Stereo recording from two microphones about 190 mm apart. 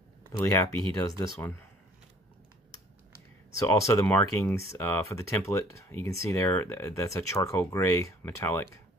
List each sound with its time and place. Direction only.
0.4 s speech: 15° left (ahead or behind)
3.5 s speech: 15° left (ahead or behind)